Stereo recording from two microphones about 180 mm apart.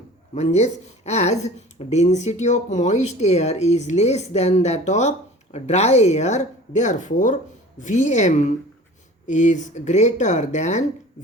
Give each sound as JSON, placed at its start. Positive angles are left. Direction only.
{"t": 0.3, "sound": "speech", "side_deg": 40}